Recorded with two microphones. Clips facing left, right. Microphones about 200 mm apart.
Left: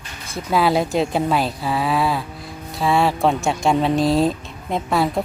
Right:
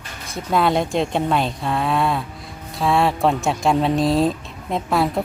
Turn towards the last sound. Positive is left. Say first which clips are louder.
# even
turn(degrees=0)  # may be behind; listen again after turning